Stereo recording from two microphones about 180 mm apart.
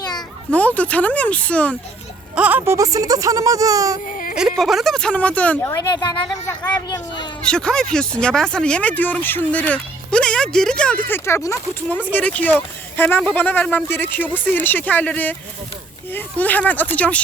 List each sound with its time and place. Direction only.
0.5 s speech: 10° left (ahead or behind)
2.3 s speech: 10° right (ahead or behind)
4.1 s a sound: 50° left (ahead or behind)
4.4 s speech: centre (ahead or behind)
5.7 s a woman's voice: 20° left (ahead or behind)
7.4 s speech: 5° left (ahead or behind)